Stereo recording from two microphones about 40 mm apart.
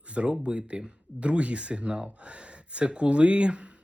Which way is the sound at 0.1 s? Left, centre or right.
Right.